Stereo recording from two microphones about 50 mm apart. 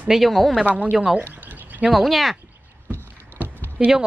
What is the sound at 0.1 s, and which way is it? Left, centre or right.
Speech, centre.